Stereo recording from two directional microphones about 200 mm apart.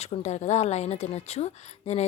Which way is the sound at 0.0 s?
35° left (ahead or behind).